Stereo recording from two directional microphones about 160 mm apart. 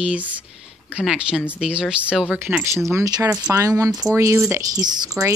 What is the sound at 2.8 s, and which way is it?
Speech, 20° right (ahead or behind).